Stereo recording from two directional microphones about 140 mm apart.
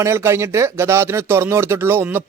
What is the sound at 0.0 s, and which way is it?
A man's voice, 20° right (ahead or behind).